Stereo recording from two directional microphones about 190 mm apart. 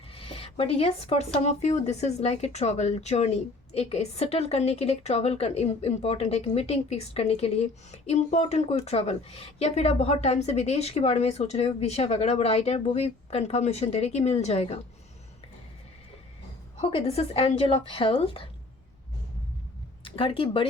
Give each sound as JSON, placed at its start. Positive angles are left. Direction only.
{"t": 0.1, "sound": "a woman's voice", "side_deg": 30}
{"t": 16.8, "sound": "speech", "side_deg": 30}
{"t": 20.1, "sound": "speech", "side_deg": 30}